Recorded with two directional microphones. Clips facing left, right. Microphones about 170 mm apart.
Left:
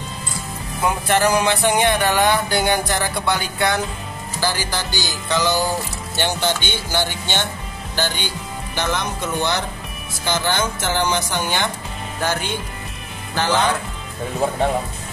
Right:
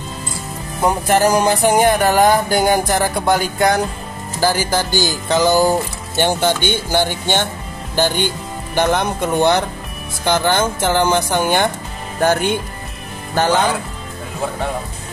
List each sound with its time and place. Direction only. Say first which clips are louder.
0.7 s music: right 4 dB; 40° right (ahead or behind)
4.4 s speech: right 7 dB; 45° right (ahead or behind)
8.7 s speech: right 7 dB; 50° right (ahead or behind)